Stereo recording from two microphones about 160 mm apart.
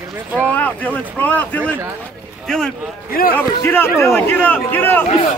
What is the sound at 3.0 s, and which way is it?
Speech, 65° left (ahead or behind).